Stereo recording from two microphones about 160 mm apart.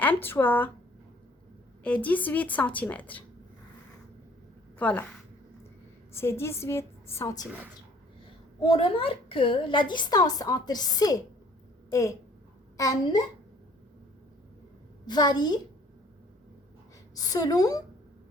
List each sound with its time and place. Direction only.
0.0 s a woman's voice: 10° left (ahead or behind)
1.8 s a woman's voice: 10° left (ahead or behind)
4.8 s a woman's voice: 10° left (ahead or behind)
6.1 s a woman's voice: 15° left (ahead or behind)
8.6 s a woman's voice: 35° left (ahead or behind)
15.0 s a woman's voice: 25° left (ahead or behind)
17.2 s a woman's voice: 25° left (ahead or behind)